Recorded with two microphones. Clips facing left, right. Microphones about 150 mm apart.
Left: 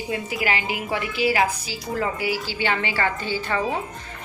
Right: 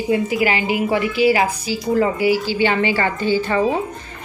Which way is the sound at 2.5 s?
10° right (ahead or behind).